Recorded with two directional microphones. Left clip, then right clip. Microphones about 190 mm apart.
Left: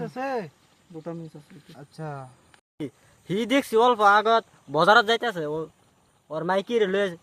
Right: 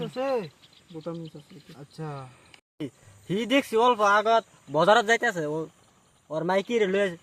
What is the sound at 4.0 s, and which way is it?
Speech, 35° left (ahead or behind).